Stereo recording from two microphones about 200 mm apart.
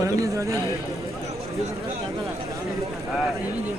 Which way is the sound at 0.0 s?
15° right (ahead or behind).